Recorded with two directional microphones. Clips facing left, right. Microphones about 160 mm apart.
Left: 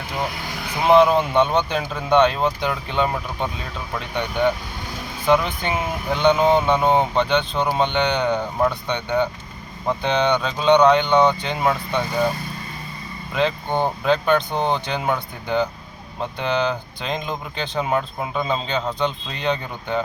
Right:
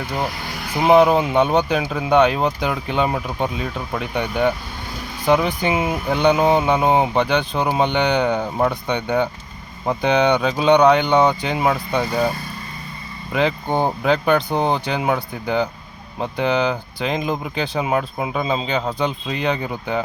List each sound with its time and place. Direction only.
0.9 s speech: 10° right (ahead or behind)
5.2 s speech: 15° right (ahead or behind)
13.3 s speech: 10° right (ahead or behind)